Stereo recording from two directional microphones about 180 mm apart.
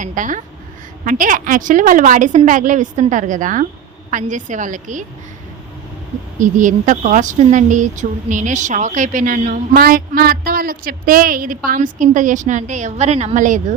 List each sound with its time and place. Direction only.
0.0 s speech: 45° right (ahead or behind)
6.4 s speech: 45° right (ahead or behind)